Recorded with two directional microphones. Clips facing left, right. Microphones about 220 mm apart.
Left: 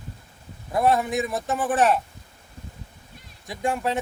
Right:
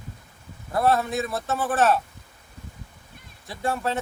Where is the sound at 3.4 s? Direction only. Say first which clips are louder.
Left 1 dB; 15° left (ahead or behind).